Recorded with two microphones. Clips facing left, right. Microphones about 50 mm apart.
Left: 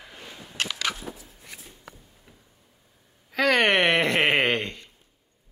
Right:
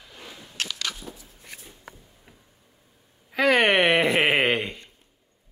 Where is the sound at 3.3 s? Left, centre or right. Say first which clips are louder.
Right 1 dB; centre.